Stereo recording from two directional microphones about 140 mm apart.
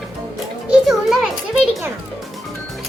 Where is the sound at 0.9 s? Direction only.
Centre (ahead or behind).